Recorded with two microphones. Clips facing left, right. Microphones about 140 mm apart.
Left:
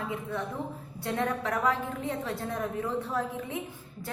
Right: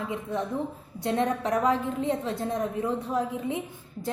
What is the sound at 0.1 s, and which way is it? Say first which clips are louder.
A woman's voice: right 4 dB; 20° right (ahead or behind).